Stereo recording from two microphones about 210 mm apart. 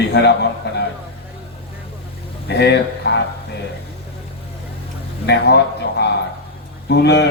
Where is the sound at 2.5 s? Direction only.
50° left (ahead or behind).